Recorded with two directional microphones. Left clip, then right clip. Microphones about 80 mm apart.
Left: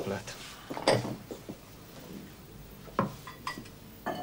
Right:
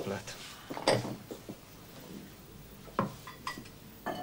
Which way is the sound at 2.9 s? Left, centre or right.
Right.